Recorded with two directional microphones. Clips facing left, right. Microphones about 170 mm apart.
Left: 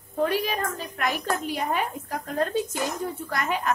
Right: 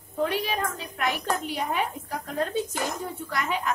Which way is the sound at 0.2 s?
45° left (ahead or behind).